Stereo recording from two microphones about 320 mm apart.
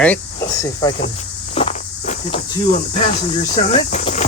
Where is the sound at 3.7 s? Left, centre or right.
Left.